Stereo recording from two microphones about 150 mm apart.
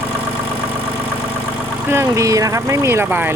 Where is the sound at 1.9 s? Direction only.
20° right (ahead or behind).